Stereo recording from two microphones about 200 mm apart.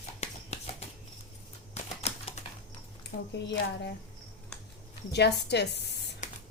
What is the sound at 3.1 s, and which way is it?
Speech, 45° left (ahead or behind).